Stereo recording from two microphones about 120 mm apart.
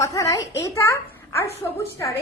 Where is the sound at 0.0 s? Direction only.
25° left (ahead or behind).